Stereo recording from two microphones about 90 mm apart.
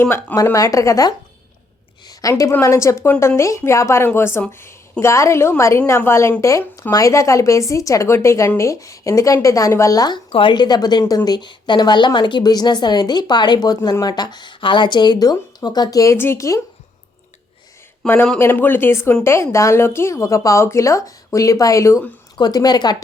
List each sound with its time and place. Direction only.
0.0 s speech: 25° left (ahead or behind)
0.5 s a woman's voice: 40° left (ahead or behind)
2.4 s a woman's voice: 35° left (ahead or behind)
10.2 s a woman's voice: 90° left
10.5 s a woman's voice: 55° left (ahead or behind)
16.1 s speech: 25° left (ahead or behind)
18.0 s a woman's voice: 20° left (ahead or behind); by 22.0 s 35° left (ahead or behind)
22.4 s a woman's voice: 50° left (ahead or behind)